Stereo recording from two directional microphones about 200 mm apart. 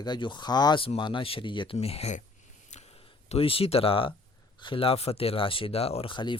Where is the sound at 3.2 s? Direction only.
30° left (ahead or behind).